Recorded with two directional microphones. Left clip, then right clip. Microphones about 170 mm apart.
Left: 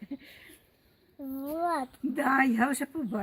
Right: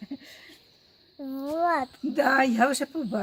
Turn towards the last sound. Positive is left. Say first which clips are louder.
# right 4 dB
turn(degrees=-50)  # may be behind; listen again after turning